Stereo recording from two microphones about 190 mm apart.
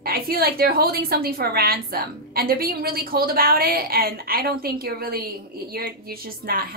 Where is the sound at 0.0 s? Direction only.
50° right (ahead or behind).